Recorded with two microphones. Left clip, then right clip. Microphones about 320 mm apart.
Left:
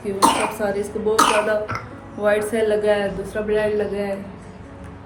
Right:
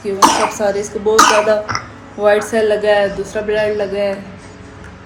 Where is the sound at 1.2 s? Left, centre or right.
Centre.